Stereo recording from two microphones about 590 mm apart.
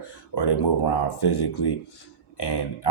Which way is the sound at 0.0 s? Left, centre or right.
Left.